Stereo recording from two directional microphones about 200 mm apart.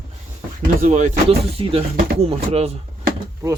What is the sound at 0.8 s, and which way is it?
Speech, 35° right (ahead or behind).